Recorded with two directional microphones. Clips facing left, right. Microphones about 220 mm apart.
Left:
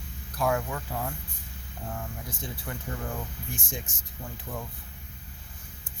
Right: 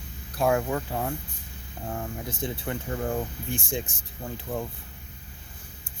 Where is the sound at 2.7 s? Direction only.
25° right (ahead or behind).